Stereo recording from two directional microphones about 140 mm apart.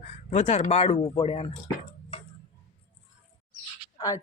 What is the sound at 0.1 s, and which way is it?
Speech, 50° left (ahead or behind).